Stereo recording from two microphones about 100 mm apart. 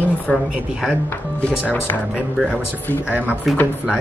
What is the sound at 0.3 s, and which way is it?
Speech, 15° left (ahead or behind).